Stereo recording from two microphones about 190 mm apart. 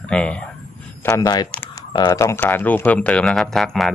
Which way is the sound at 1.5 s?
10° left (ahead or behind).